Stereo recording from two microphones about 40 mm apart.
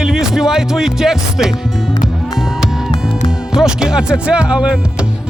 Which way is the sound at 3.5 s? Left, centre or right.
Centre.